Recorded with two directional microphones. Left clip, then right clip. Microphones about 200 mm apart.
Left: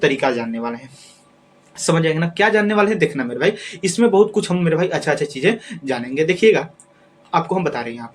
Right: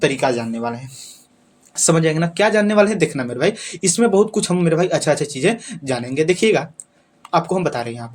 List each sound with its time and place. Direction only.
0.0 s speech: 45° right (ahead or behind)